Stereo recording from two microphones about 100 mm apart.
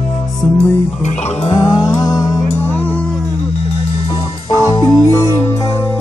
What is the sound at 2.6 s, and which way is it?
Music, 20° left (ahead or behind).